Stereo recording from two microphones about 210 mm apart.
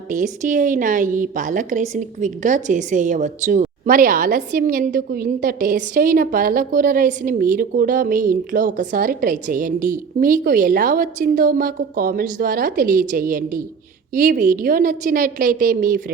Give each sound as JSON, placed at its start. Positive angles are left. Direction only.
{"t": 0.1, "sound": "a woman's voice", "side_deg": -40}